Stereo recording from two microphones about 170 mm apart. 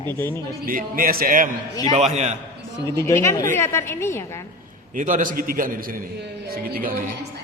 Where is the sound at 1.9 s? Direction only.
40° right (ahead or behind).